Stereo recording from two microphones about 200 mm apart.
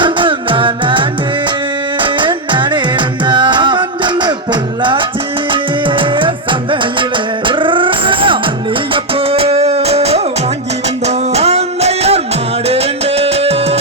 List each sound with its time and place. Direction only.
0.0 s music: 25° right (ahead or behind)
2.0 s music: 25° right (ahead or behind)